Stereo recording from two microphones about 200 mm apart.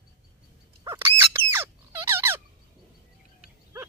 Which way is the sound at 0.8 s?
10° right (ahead or behind).